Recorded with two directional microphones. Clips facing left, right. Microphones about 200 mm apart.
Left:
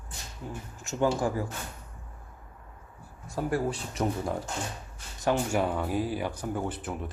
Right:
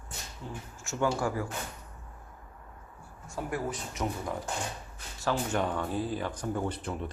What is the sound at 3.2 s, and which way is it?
Speech, 35° left (ahead or behind).